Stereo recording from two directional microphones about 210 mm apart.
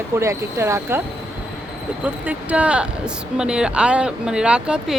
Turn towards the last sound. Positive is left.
turn(degrees=-5)  # may be behind; listen again after turning